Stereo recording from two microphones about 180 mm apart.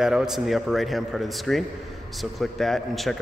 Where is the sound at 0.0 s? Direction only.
Centre (ahead or behind).